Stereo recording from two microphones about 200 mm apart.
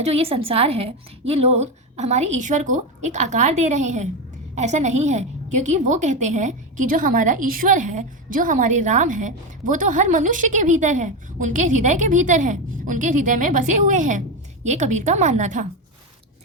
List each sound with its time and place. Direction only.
0.0 s a woman's voice: 30° right (ahead or behind)